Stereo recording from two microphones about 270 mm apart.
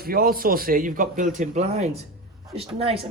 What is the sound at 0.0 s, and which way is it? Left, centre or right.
A man's voice, right.